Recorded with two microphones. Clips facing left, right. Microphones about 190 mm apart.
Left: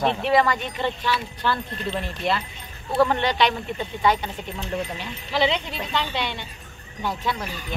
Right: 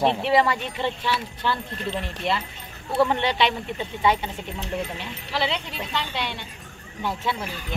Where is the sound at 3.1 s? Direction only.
25° right (ahead or behind).